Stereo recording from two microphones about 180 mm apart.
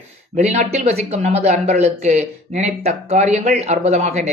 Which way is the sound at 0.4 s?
40° right (ahead or behind).